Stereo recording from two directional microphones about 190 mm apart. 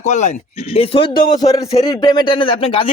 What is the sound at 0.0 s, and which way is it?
Speech, 40° left (ahead or behind).